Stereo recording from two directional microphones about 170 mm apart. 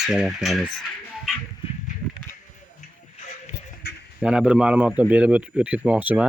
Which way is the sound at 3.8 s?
75° left (ahead or behind).